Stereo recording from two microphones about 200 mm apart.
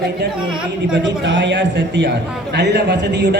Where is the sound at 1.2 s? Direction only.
60° right (ahead or behind).